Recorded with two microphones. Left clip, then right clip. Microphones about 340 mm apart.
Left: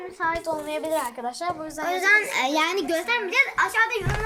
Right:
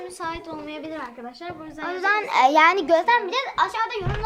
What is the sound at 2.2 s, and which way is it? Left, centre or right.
A woman's voice, centre.